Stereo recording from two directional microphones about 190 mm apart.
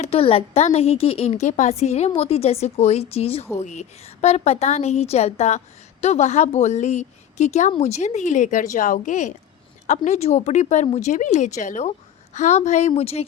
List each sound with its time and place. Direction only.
0.0 s a woman's voice: 30° left (ahead or behind)